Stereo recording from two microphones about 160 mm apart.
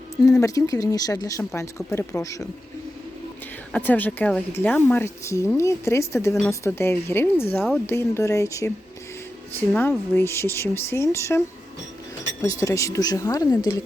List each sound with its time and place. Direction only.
0.4 s speech: 20° left (ahead or behind)
3.7 s speech: 10° left (ahead or behind)